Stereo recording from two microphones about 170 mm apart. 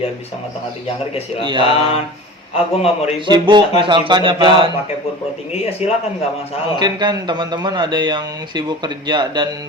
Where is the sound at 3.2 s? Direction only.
25° right (ahead or behind).